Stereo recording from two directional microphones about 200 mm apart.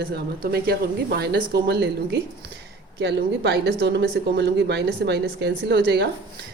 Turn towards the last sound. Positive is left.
turn(degrees=-55)  # may be behind; listen again after turning